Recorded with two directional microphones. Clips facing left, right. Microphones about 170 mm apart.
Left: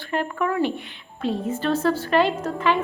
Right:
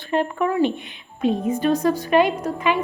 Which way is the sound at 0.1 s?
20° right (ahead or behind).